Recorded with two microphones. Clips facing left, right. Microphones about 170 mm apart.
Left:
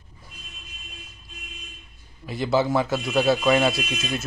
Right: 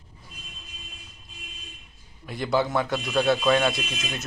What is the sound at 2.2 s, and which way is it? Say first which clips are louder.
Speech: left 3 dB; 5° left (ahead or behind).